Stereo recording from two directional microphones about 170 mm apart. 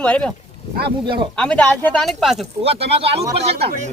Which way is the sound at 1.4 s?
5° left (ahead or behind).